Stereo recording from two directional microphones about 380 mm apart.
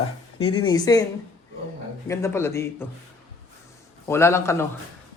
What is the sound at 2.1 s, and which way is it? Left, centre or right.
Speech, centre.